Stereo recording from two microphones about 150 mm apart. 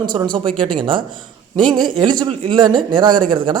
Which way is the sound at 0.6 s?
35° right (ahead or behind).